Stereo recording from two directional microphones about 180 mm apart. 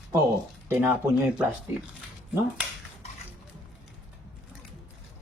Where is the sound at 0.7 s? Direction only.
10° right (ahead or behind).